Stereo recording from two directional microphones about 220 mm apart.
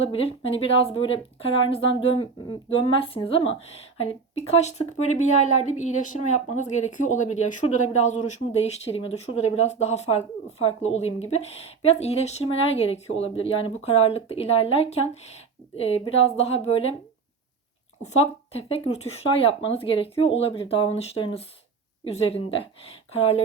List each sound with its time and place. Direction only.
0.0 s speech: 25° left (ahead or behind)
18.0 s speech: 30° left (ahead or behind)